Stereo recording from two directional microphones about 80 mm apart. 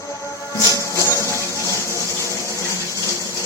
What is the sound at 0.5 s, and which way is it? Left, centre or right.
Music, left.